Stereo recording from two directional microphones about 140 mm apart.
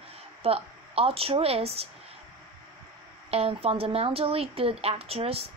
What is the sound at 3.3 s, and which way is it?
Speech, 45° right (ahead or behind).